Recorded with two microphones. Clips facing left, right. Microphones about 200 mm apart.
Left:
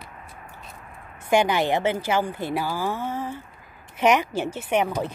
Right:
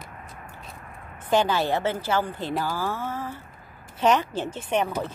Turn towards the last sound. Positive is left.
turn(degrees=10)  # may be behind; listen again after turning